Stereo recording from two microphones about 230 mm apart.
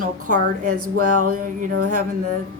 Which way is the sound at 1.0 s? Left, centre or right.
Right.